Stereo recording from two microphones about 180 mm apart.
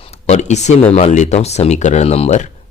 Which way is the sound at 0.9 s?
35° left (ahead or behind).